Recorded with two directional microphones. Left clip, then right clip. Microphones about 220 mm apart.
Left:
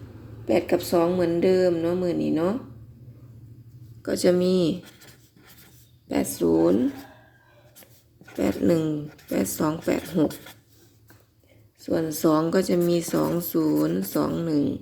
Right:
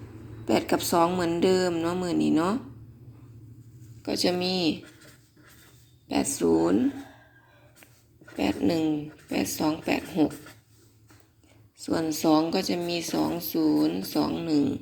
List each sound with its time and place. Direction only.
0.4 s speech: 10° left (ahead or behind)
4.0 s speech: 25° left (ahead or behind)
6.1 s speech: 20° left (ahead or behind)
7.8 s speech: 20° left (ahead or behind)
11.8 s speech: 15° left (ahead or behind)